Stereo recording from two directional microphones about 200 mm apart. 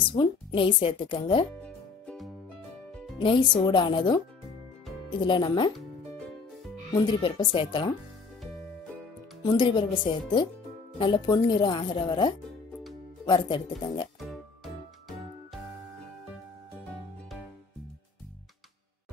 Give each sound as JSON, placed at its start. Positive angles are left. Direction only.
{"t": 0.0, "sound": "speech", "side_deg": 25}
{"t": 1.6, "sound": "music", "side_deg": 5}
{"t": 3.2, "sound": "speech", "side_deg": 25}
{"t": 5.2, "sound": "speech", "side_deg": 25}
{"t": 6.1, "sound": "music", "side_deg": 0}
{"t": 6.9, "sound": "speech", "side_deg": 25}
{"t": 9.4, "sound": "speech", "side_deg": 25}
{"t": 11.0, "sound": "speech", "side_deg": 25}
{"t": 14.2, "sound": "music", "side_deg": 0}